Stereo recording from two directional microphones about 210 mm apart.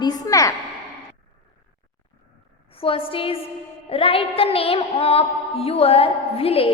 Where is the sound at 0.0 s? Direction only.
15° left (ahead or behind).